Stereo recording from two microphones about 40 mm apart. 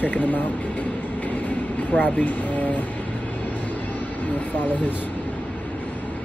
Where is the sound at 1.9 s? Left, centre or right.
Left.